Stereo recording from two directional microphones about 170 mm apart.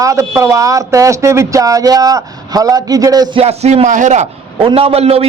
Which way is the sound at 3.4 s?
40° right (ahead or behind).